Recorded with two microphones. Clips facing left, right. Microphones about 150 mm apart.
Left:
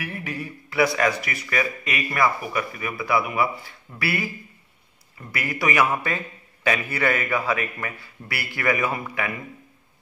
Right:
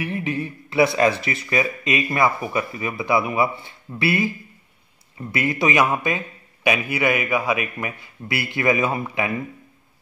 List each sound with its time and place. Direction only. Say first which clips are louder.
0.0 s speech: right 6 dB; 25° right (ahead or behind)